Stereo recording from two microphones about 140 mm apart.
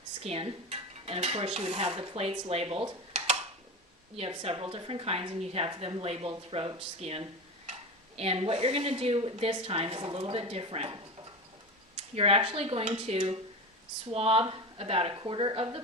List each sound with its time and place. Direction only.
0.2 s dishes: 45° right (ahead or behind)
4.2 s speech: 45° right (ahead or behind)